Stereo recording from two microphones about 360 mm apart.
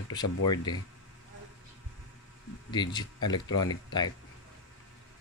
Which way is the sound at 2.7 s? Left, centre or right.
Centre.